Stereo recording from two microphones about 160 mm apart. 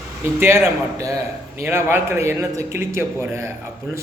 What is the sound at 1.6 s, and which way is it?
A man's voice, 15° right (ahead or behind).